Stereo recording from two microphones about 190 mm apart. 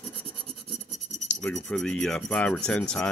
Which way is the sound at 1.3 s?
5° left (ahead or behind).